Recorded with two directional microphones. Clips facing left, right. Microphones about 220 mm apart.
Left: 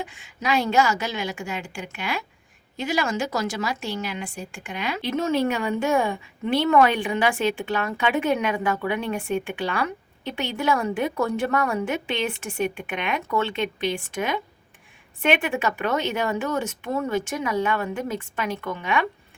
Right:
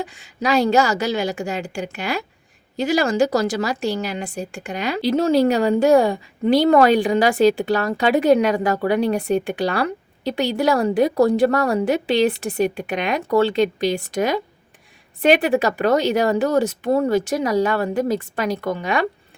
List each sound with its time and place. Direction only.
0.0 s a woman's voice: 35° right (ahead or behind)